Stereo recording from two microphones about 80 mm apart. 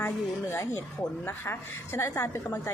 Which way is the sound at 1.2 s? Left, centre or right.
Left.